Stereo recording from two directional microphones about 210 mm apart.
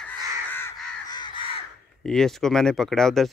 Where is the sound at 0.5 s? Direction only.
10° left (ahead or behind).